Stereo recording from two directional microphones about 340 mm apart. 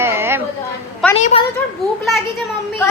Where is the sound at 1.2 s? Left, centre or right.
Centre.